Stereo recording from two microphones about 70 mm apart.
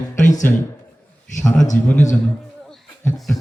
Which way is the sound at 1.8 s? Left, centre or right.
Left.